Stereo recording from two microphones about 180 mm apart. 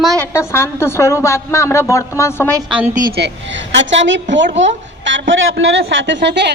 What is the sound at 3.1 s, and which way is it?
A woman's voice, 75° right (ahead or behind).